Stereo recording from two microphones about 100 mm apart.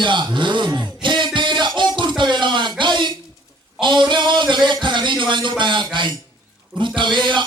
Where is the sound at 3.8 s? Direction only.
55° right (ahead or behind).